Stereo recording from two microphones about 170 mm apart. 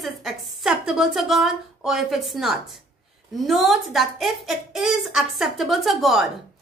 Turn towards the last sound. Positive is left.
turn(degrees=0)  # may be behind; listen again after turning